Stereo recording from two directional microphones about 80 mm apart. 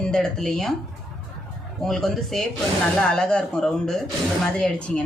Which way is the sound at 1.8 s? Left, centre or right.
Centre.